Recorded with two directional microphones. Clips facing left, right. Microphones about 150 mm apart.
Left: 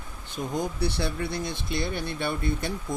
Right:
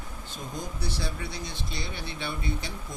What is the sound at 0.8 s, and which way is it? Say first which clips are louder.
Speech: left 6 dB; 60° left (ahead or behind).